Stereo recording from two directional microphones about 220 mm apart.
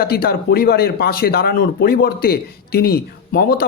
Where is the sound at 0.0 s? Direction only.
45° left (ahead or behind).